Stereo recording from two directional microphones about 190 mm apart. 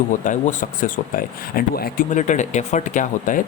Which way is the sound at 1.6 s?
50° left (ahead or behind).